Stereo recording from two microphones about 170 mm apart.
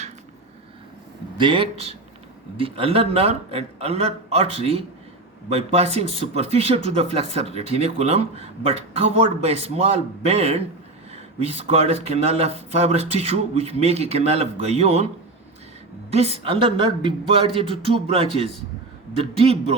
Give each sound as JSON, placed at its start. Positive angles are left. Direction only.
{"t": 1.4, "sound": "speech", "side_deg": -30}
{"t": 16.1, "sound": "speech", "side_deg": -35}